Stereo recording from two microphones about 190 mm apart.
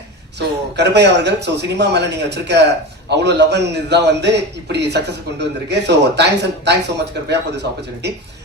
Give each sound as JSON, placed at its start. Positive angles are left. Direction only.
{"t": 0.3, "sound": "a man's voice", "side_deg": -65}